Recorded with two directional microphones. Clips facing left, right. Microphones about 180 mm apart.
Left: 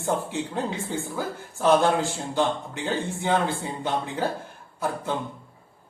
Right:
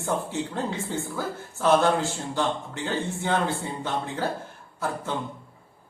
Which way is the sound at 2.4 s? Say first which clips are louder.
Left 3 dB; 15° left (ahead or behind).